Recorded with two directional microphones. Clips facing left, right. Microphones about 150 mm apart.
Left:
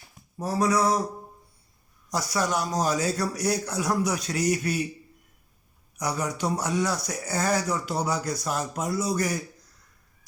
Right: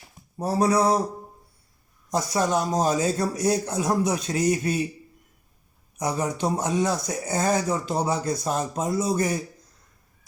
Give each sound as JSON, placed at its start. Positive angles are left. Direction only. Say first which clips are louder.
{"t": 0.3, "sound": "speech", "louder": "right 3 dB", "side_deg": -30}
{"t": 2.1, "sound": "speech", "louder": "right 3 dB", "side_deg": -25}
{"t": 6.0, "sound": "speech", "louder": "right 3 dB", "side_deg": -25}